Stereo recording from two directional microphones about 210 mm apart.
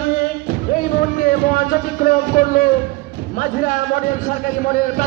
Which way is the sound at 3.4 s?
40° left (ahead or behind).